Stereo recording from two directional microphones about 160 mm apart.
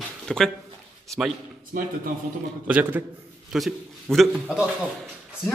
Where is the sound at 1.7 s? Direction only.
65° right (ahead or behind).